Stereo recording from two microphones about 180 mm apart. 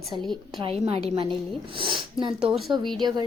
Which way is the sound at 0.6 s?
30° right (ahead or behind).